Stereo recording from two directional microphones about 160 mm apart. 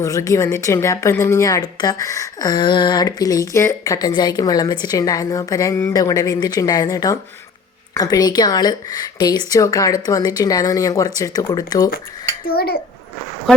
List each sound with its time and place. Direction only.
0.0 s a woman's voice: 20° left (ahead or behind)
12.5 s a child's voice: 75° left (ahead or behind)